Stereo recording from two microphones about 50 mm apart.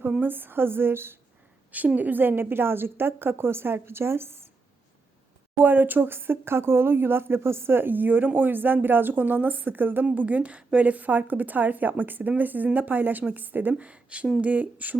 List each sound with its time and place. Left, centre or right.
0.2 s a woman's voice: right
2.0 s a woman's voice: right
5.5 s speech: right